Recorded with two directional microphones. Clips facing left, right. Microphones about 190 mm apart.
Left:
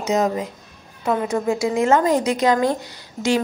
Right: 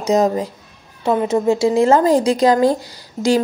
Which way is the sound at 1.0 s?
25° right (ahead or behind).